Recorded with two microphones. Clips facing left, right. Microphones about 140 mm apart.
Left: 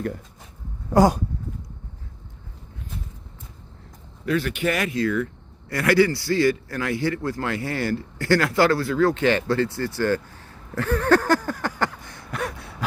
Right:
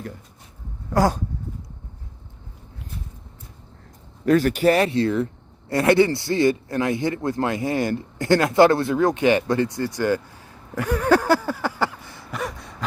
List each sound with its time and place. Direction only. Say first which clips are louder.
0.9 s speech: left 3 dB; 15° left (ahead or behind)
4.3 s a man's voice: right 6 dB; 45° right (ahead or behind); by 12.7 s centre (ahead or behind)